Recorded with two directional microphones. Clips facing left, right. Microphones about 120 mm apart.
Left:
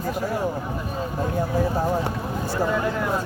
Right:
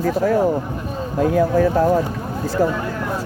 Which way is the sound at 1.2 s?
90° right.